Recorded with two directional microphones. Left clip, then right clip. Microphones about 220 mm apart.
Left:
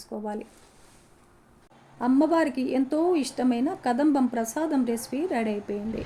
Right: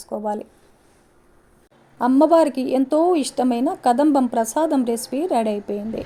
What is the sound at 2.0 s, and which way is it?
A woman's voice, 35° right (ahead or behind).